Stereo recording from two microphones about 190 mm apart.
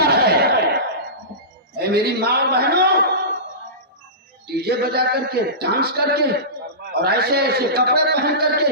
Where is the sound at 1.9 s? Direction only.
55° right (ahead or behind).